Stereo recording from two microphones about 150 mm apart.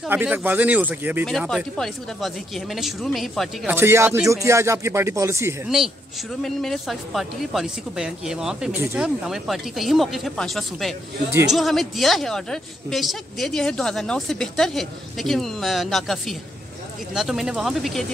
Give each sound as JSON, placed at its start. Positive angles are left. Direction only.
{"t": 0.1, "sound": "speech", "side_deg": -10}
{"t": 1.2, "sound": "a woman's voice", "side_deg": 0}
{"t": 3.6, "sound": "speech", "side_deg": -15}
{"t": 6.4, "sound": "a woman's voice", "side_deg": 0}